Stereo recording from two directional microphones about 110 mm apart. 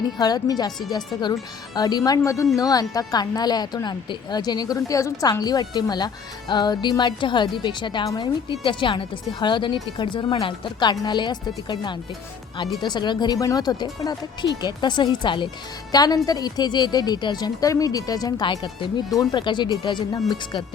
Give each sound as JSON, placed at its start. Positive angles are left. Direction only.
{"t": 0.2, "sound": "a woman's voice", "side_deg": 35}